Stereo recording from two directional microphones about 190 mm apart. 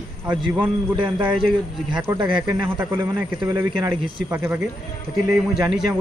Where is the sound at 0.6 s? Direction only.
25° right (ahead or behind).